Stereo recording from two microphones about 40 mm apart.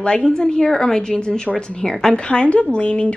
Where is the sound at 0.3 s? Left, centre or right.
Centre.